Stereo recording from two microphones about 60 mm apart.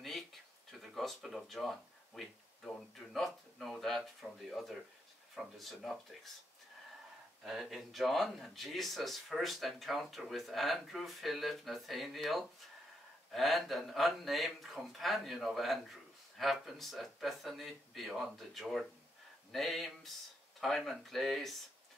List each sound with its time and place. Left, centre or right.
0.7 s speech: centre
7.4 s speech: centre